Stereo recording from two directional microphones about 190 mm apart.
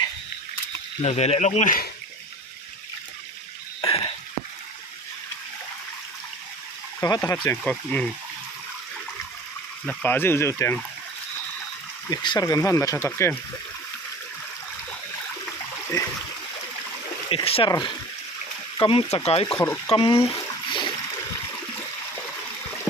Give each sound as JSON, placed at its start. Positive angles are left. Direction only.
{"t": 1.0, "sound": "speech", "side_deg": 35}
{"t": 3.8, "sound": "a sound", "side_deg": 30}
{"t": 7.0, "sound": "speech", "side_deg": 15}
{"t": 9.8, "sound": "speech", "side_deg": 10}
{"t": 12.1, "sound": "speech", "side_deg": 20}
{"t": 17.2, "sound": "speech", "side_deg": 30}
{"t": 19.5, "sound": "speech", "side_deg": 10}
{"t": 19.9, "sound": "speech", "side_deg": 30}